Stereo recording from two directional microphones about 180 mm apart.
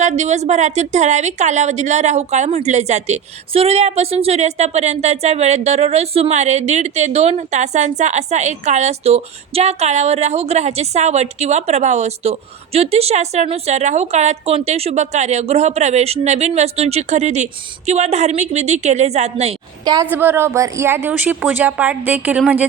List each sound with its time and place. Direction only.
0.0 s a woman's voice: 40° right (ahead or behind)
19.8 s a woman's voice: 20° right (ahead or behind)
20.1 s a woman's voice: 10° right (ahead or behind)